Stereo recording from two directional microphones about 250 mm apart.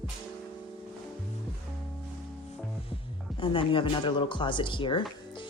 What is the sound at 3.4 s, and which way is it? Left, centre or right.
Speech, centre.